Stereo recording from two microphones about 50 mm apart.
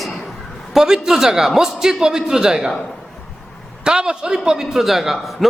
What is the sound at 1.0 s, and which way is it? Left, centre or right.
A man's voice, centre.